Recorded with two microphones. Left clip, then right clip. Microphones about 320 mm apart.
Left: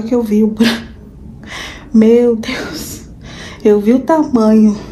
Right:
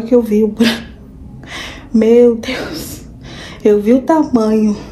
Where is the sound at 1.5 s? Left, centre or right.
Centre.